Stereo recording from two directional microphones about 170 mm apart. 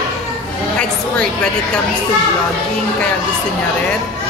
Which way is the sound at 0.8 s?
5° left (ahead or behind).